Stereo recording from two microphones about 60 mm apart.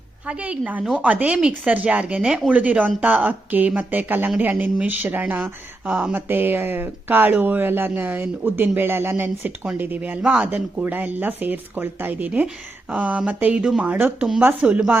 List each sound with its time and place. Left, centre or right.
0.3 s speech: right
10.2 s speech: centre